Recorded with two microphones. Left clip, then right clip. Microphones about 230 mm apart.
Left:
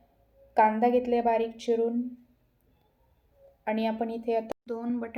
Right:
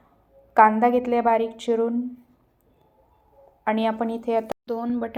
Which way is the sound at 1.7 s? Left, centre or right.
Right.